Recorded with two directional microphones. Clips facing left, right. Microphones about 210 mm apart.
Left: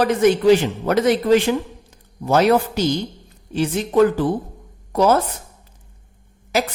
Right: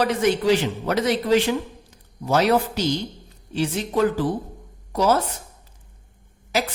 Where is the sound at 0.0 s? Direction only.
50° left (ahead or behind).